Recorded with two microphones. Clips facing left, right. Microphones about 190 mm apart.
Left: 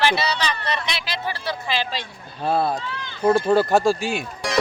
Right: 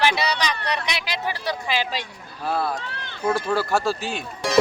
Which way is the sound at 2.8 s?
60° right (ahead or behind).